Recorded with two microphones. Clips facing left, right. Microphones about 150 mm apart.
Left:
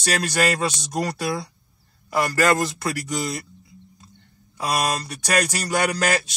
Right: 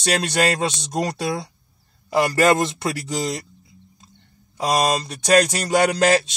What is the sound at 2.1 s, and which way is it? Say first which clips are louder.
Speech: right 3 dB; 25° right (ahead or behind).